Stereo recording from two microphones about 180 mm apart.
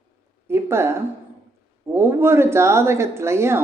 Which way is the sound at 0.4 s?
15° right (ahead or behind).